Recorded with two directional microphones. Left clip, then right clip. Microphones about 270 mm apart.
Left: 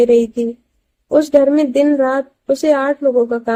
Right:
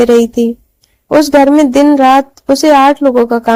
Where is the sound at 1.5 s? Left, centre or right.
Right.